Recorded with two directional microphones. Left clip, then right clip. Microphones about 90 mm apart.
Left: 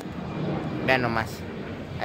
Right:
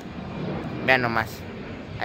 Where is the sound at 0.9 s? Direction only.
25° right (ahead or behind).